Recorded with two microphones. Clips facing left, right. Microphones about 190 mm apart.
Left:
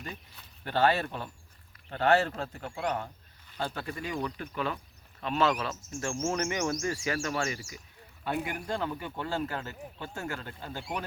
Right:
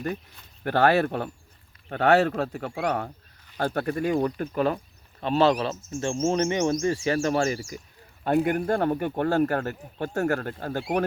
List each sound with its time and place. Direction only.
0.6 s speech: 60° right (ahead or behind); by 4.8 s 40° right (ahead or behind)
5.2 s speech: 30° right (ahead or behind)
8.2 s speech: 45° right (ahead or behind); by 11.0 s 60° right (ahead or behind)